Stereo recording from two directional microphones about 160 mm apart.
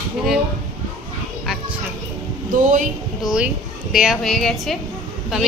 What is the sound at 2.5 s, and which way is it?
Speech, 55° right (ahead or behind).